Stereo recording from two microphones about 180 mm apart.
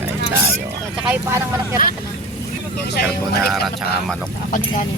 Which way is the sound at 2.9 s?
60° left (ahead or behind).